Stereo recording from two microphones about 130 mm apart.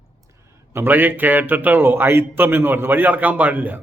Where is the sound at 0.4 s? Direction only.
20° right (ahead or behind).